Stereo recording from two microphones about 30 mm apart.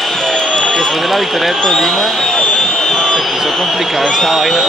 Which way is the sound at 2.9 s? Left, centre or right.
Left.